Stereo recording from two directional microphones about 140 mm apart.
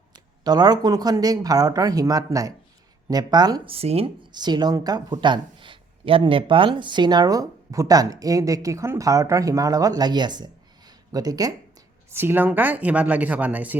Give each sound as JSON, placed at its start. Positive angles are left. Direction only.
{"t": 0.1, "sound": "a woman's voice", "side_deg": -30}
{"t": 3.7, "sound": "a woman's voice", "side_deg": -45}
{"t": 12.1, "sound": "speech", "side_deg": -15}